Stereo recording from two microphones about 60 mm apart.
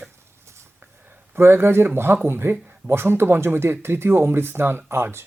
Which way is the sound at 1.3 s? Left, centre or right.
Right.